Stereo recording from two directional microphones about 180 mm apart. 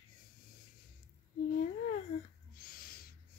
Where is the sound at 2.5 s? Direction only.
55° left (ahead or behind).